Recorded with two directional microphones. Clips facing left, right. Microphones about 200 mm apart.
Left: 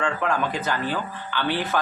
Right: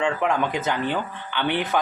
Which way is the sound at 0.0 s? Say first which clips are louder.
Right 2 dB; 20° right (ahead or behind).